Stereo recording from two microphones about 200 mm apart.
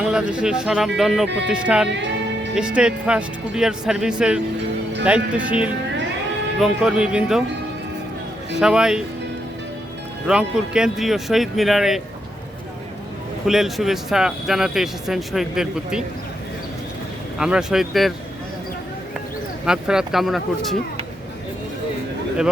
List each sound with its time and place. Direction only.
0.0 s speech: 5° right (ahead or behind)
1.9 s music: 60° right (ahead or behind)
2.6 s speech: 5° right (ahead or behind)
8.5 s speech: 5° right (ahead or behind)
10.2 s speech: 5° right (ahead or behind)
13.5 s speech: centre (ahead or behind)
17.3 s speech: 5° right (ahead or behind)
19.6 s speech: 5° right (ahead or behind)